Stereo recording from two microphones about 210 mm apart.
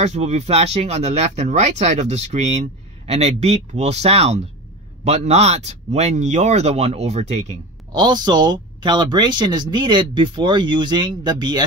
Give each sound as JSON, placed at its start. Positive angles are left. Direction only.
{"t": 0.0, "sound": "speech", "side_deg": -30}
{"t": 7.9, "sound": "speech", "side_deg": -20}